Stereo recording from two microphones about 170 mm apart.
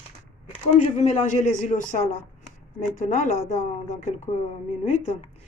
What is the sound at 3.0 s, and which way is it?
Speech, 45° left (ahead or behind).